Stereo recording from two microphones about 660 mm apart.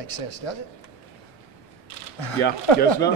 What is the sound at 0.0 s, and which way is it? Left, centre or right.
Speech, left.